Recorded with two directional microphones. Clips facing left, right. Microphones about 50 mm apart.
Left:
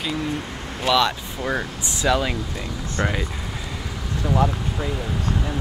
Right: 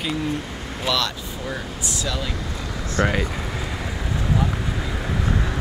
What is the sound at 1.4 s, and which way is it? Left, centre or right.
Speech, left.